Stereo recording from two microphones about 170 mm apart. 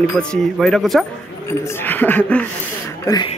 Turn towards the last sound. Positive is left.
turn(degrees=25)  # may be behind; listen again after turning